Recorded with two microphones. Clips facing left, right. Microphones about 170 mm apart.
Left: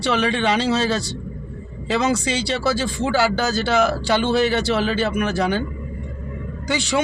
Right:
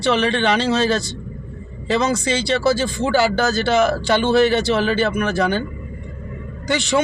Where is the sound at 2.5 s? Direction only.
10° left (ahead or behind).